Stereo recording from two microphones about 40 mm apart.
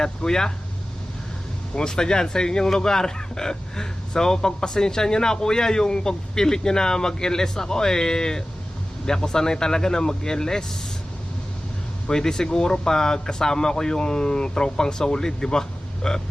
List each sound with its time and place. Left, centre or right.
0.0 s speech: centre
1.7 s speech: centre
12.0 s speech: centre